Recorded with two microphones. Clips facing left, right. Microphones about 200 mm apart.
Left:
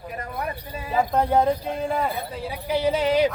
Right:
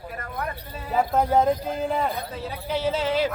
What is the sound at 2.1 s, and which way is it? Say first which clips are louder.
Speech: left 1 dB; 15° left (ahead or behind).